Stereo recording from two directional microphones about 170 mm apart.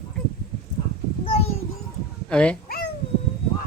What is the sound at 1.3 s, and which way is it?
Child singing, 35° left (ahead or behind).